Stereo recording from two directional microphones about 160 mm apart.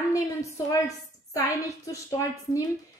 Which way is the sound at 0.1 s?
20° left (ahead or behind).